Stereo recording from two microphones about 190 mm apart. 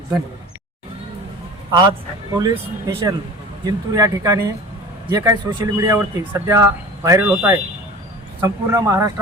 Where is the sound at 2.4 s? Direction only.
20° right (ahead or behind).